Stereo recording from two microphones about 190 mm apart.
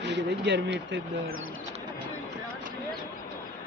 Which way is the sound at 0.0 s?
65° right (ahead or behind).